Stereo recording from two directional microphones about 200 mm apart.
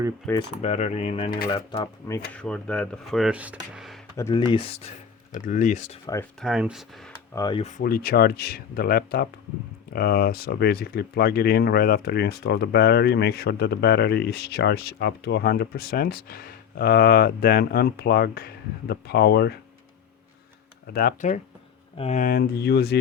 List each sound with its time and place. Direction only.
0.6 s speech: 35° left (ahead or behind)
2.3 s speech: 5° left (ahead or behind)
4.2 s speech: 15° left (ahead or behind)
5.3 s speech: 40° left (ahead or behind)
6.4 s speech: 5° right (ahead or behind)
7.3 s speech: 20° left (ahead or behind)
7.8 s speech: 50° left (ahead or behind)
20.8 s speech: 50° left (ahead or behind)